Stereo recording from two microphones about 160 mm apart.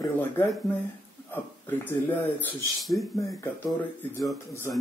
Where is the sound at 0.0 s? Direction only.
15° left (ahead or behind).